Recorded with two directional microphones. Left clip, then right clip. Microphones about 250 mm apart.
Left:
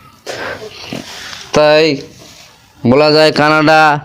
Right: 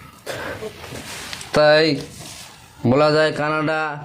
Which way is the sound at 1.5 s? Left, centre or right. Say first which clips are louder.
Left 6 dB; left.